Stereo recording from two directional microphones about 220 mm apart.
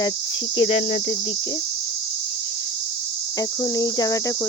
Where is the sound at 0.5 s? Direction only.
25° left (ahead or behind).